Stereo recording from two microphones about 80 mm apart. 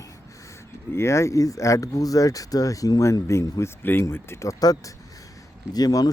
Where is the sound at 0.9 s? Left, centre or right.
Left.